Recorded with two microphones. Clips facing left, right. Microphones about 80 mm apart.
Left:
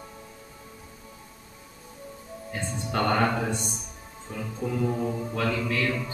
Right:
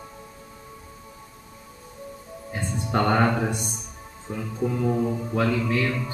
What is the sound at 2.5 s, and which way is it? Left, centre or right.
Music, centre.